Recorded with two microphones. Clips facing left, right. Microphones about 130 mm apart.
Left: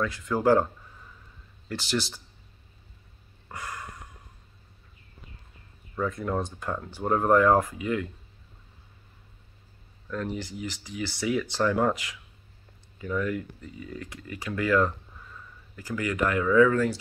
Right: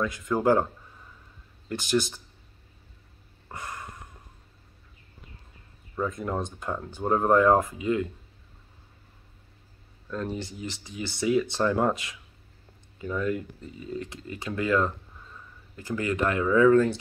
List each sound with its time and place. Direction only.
0.0 s speech: 20° right (ahead or behind)
1.7 s speech: 15° right (ahead or behind)
3.5 s a sound: 25° right (ahead or behind)
5.9 s speech: 20° right (ahead or behind)
10.0 s speech: 20° right (ahead or behind)